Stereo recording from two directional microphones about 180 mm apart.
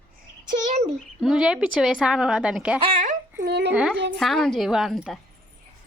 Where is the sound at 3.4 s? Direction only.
65° right (ahead or behind).